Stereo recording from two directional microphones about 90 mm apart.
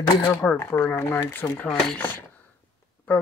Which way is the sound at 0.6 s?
25° left (ahead or behind).